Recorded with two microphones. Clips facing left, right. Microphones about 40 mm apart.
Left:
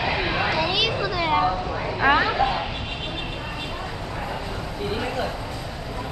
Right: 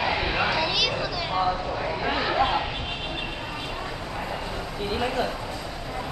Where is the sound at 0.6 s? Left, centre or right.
Centre.